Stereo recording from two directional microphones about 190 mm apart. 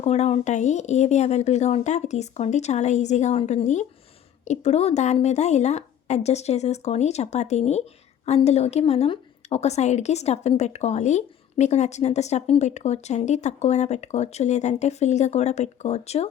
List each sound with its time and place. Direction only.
0.0 s a woman's voice: 35° left (ahead or behind)